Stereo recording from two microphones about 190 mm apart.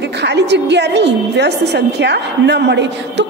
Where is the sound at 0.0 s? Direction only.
65° right (ahead or behind).